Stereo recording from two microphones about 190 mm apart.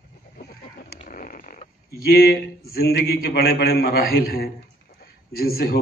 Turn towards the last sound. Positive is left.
turn(degrees=50)  # may be behind; listen again after turning